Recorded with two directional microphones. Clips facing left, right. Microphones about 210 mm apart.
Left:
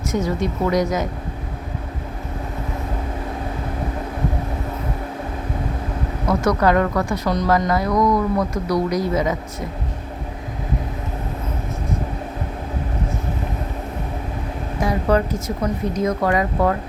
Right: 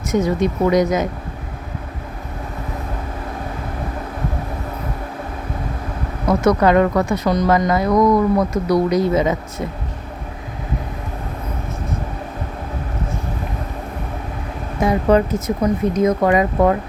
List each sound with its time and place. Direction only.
0.1 s a woman's voice: 20° right (ahead or behind)
6.4 s a woman's voice: 20° right (ahead or behind)
14.8 s a woman's voice: 20° right (ahead or behind)